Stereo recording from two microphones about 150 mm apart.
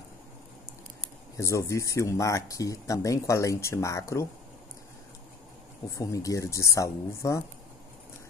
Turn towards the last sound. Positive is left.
turn(degrees=20)  # may be behind; listen again after turning